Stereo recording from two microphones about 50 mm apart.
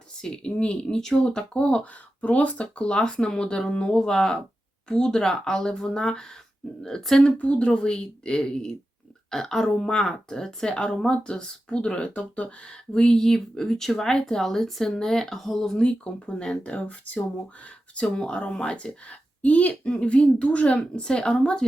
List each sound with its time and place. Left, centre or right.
0.2 s speech: centre
7.2 s a woman's voice: left